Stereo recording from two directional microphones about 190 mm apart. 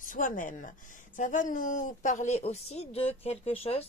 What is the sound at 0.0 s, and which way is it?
Speech, 45° left (ahead or behind).